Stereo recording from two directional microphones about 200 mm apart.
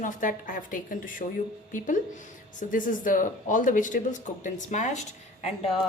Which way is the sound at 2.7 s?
40° left (ahead or behind).